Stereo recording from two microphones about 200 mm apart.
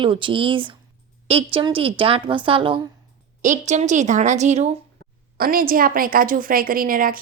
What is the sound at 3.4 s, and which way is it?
A woman's voice, 35° right (ahead or behind).